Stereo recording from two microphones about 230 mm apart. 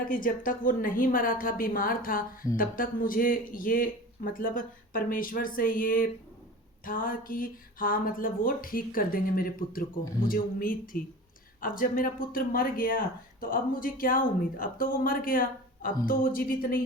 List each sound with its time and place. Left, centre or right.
0.0 s speech: left